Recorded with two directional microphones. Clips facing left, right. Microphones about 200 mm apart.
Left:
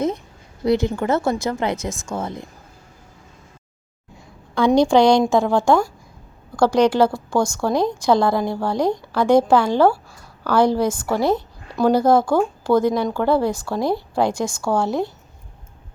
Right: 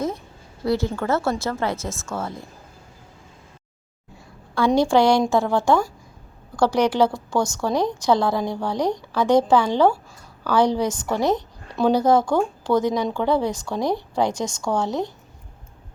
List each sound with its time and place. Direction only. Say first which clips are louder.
0.6 s a woman's voice: left 4 dB; 20° left (ahead or behind)
4.5 s a woman's voice: left 3 dB; 20° left (ahead or behind)